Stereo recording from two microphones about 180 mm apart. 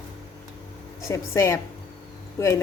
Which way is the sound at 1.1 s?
15° left (ahead or behind).